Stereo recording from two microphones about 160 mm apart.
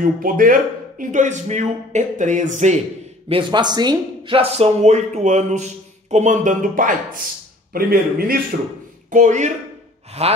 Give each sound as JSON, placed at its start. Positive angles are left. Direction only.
{"t": 0.0, "sound": "speech", "side_deg": -60}
{"t": 3.3, "sound": "a man's voice", "side_deg": -30}
{"t": 9.1, "sound": "speech", "side_deg": -50}